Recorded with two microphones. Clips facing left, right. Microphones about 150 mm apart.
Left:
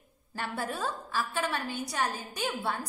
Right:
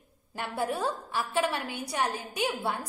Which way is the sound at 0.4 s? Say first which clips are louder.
Right 3 dB; 20° right (ahead or behind).